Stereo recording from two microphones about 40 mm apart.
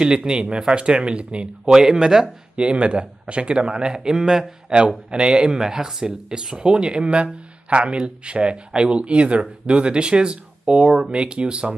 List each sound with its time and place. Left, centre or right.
0.0 s speech: right
1.7 s speech: centre